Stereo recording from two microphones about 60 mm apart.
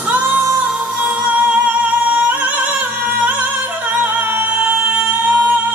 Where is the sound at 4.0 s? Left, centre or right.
Right.